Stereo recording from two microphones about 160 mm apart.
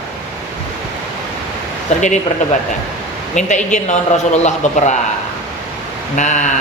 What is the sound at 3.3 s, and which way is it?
Speech, 50° left (ahead or behind).